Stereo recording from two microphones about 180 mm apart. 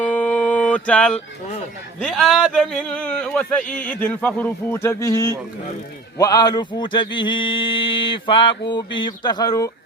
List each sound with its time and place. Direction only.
0.0 s mantra: 10° left (ahead or behind)
2.0 s speech: 5° left (ahead or behind)
6.1 s a sound: 20° left (ahead or behind)